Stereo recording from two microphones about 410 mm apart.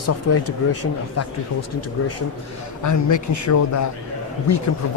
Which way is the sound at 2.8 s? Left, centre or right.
Left.